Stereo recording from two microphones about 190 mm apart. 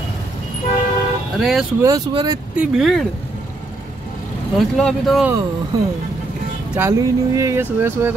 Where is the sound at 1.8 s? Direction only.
20° right (ahead or behind).